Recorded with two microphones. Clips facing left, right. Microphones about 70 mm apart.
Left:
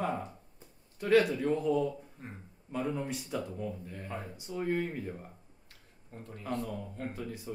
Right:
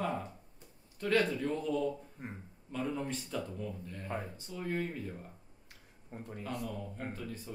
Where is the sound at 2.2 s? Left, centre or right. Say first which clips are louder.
Right 3 dB; centre.